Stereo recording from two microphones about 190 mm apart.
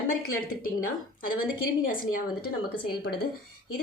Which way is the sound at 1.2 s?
50° left (ahead or behind).